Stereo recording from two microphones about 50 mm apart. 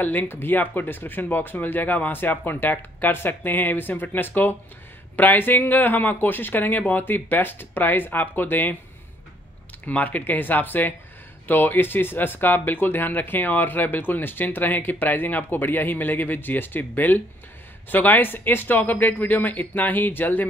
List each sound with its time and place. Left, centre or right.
0.0 s speech: left
9.8 s speech: left